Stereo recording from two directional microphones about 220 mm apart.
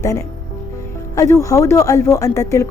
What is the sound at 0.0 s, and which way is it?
Speech, 15° left (ahead or behind).